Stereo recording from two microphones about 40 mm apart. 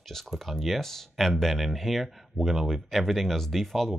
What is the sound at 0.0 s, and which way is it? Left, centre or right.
Speech, centre.